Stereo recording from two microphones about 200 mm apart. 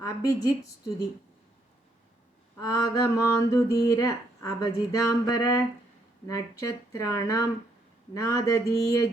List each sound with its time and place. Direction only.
0.0 s speech: 20° left (ahead or behind)
2.6 s speech: 15° left (ahead or behind)